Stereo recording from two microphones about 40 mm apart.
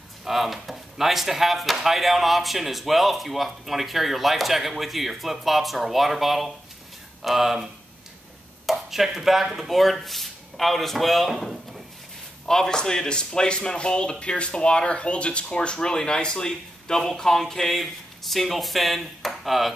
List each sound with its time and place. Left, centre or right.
0.2 s speech: centre
11.2 s drawer open or close: centre
12.4 s speech: centre